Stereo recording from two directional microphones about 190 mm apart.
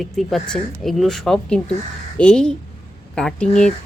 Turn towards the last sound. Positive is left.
turn(degrees=5)  # may be behind; listen again after turning